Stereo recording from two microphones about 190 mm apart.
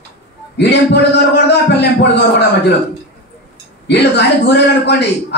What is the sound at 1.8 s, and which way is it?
Speech, 60° left (ahead or behind).